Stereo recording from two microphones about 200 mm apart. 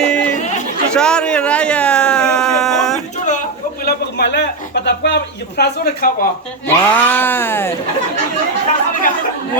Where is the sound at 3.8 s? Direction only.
55° left (ahead or behind).